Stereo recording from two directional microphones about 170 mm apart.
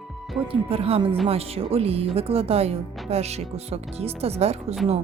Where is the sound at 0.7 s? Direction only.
35° right (ahead or behind).